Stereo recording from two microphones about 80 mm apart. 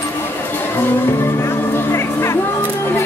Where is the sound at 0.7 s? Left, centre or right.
Left.